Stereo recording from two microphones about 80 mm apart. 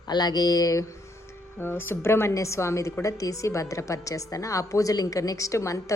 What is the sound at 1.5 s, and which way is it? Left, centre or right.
A woman's voice, left.